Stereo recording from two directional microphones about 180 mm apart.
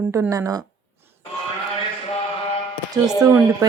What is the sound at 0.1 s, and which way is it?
Speech, 15° right (ahead or behind).